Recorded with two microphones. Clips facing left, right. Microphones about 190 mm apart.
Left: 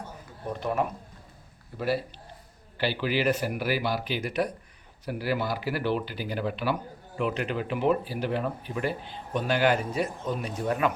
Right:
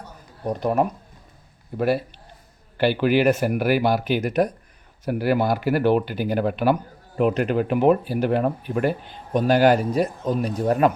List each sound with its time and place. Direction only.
0.4 s speech: 40° right (ahead or behind)
2.7 s speech: 55° right (ahead or behind)
5.0 s speech: 55° right (ahead or behind)